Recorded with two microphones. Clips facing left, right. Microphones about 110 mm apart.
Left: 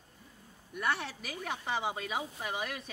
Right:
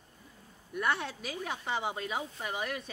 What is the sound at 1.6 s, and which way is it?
Speech, 5° left (ahead or behind).